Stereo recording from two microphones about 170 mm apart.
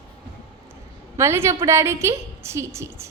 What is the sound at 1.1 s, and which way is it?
A woman's voice, 15° right (ahead or behind).